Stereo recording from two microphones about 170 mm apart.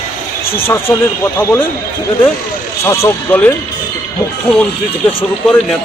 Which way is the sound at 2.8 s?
15° left (ahead or behind).